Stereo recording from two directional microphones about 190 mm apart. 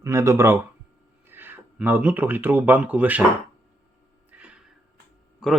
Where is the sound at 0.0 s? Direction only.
15° right (ahead or behind).